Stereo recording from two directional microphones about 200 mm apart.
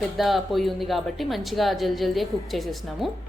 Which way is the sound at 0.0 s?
Centre (ahead or behind).